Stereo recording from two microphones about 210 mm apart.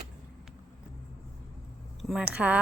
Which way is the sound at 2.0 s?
5° right (ahead or behind).